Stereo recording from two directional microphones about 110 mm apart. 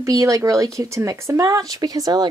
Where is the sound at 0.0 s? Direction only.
30° right (ahead or behind).